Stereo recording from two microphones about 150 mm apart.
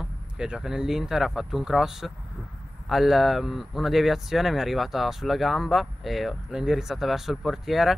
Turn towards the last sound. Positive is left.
turn(degrees=0)  # may be behind; listen again after turning